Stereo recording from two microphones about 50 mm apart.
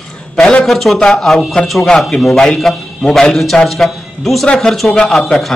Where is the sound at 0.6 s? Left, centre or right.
Centre.